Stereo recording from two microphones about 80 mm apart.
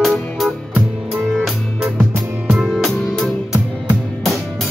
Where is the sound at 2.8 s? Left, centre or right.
Centre.